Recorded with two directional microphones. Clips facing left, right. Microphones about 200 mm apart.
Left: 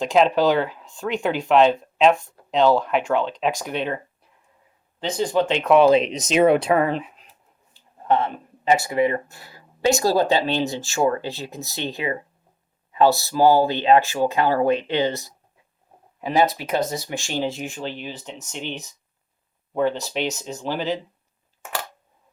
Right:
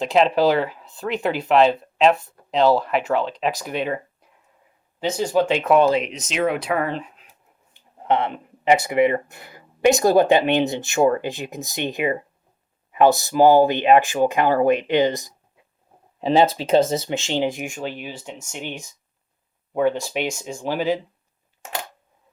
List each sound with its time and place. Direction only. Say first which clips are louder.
0.0 s speech: even; centre (ahead or behind)
6.0 s speech: left 5 dB; 35° left (ahead or behind)
7.7 s speech: even; 20° right (ahead or behind)
16.2 s speech: right 3 dB; 25° right (ahead or behind); by 21.0 s 10° right (ahead or behind)